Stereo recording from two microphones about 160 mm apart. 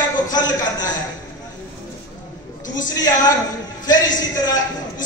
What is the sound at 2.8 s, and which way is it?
Speech, 25° left (ahead or behind).